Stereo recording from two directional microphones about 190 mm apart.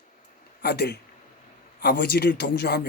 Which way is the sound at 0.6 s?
55° left (ahead or behind).